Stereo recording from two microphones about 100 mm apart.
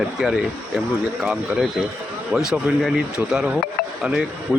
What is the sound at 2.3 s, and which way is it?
Speech, 5° right (ahead or behind).